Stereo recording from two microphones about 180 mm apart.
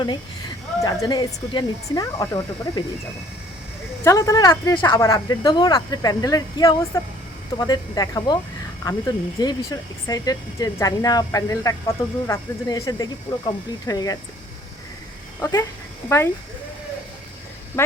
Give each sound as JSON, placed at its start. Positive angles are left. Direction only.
{"t": 0.8, "sound": "speech", "side_deg": 20}
{"t": 4.0, "sound": "speech", "side_deg": 20}
{"t": 9.4, "sound": "speech", "side_deg": 20}
{"t": 15.4, "sound": "speech", "side_deg": 15}
{"t": 17.8, "sound": "speech", "side_deg": 15}